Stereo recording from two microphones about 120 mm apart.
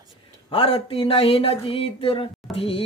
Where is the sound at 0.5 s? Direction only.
50° left (ahead or behind).